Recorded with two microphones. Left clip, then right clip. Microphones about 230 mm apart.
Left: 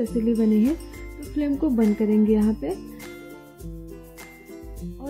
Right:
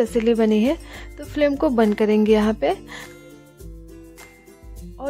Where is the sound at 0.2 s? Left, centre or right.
Right.